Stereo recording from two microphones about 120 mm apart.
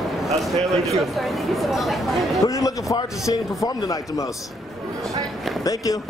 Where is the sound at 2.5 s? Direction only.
25° left (ahead or behind).